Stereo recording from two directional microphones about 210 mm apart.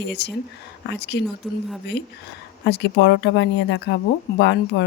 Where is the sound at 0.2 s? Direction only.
50° left (ahead or behind).